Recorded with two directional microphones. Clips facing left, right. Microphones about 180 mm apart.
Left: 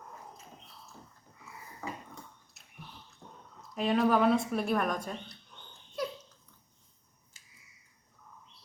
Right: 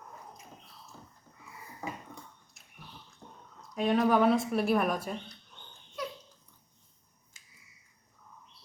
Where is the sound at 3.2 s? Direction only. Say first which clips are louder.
Even; 20° right (ahead or behind).